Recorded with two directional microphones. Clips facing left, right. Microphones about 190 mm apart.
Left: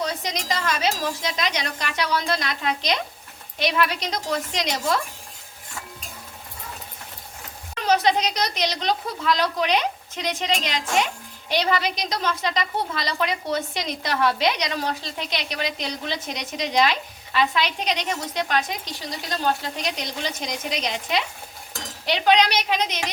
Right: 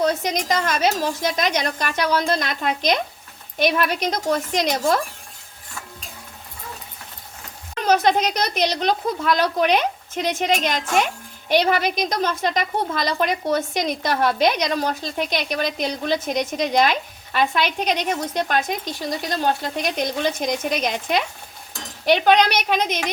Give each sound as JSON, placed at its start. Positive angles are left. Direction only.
{"t": 0.0, "sound": "a woman's voice", "side_deg": -50}
{"t": 7.9, "sound": "a woman's voice", "side_deg": -50}